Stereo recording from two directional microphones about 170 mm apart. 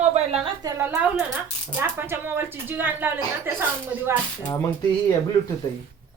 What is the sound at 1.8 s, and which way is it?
Speech, 15° right (ahead or behind).